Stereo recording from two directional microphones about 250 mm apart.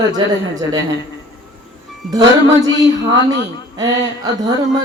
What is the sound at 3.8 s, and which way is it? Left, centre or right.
A man's voice, centre.